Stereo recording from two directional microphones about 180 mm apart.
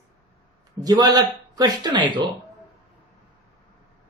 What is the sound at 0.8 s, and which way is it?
A man's voice, 20° right (ahead or behind).